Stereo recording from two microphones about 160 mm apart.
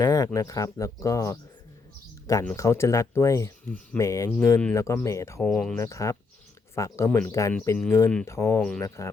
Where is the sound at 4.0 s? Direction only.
20° left (ahead or behind).